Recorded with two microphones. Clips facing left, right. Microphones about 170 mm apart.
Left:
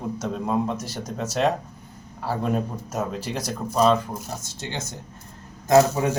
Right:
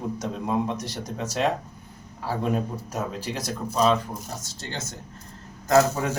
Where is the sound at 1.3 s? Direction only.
10° right (ahead or behind).